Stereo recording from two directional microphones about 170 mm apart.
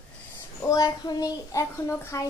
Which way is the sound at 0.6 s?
20° left (ahead or behind).